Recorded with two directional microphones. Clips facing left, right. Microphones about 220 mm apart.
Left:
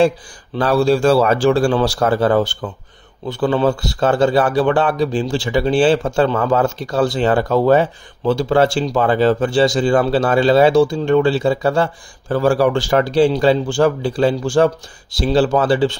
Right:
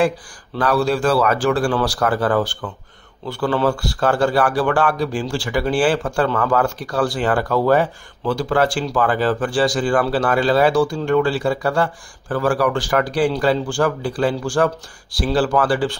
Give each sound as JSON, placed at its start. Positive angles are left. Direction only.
{"t": 0.6, "sound": "speech", "side_deg": 30}